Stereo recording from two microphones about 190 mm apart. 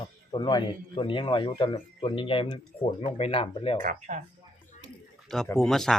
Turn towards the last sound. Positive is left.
turn(degrees=0)  # may be behind; listen again after turning